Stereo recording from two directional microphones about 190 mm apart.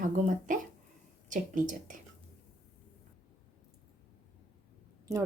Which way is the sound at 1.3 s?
45° right (ahead or behind).